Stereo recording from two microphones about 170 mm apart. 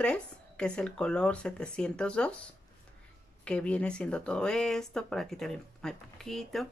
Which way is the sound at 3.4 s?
5° left (ahead or behind).